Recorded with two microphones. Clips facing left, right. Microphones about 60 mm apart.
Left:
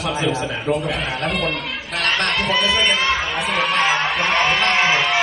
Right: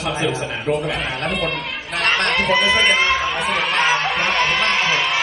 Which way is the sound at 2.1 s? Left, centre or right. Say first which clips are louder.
Right 2 dB; centre.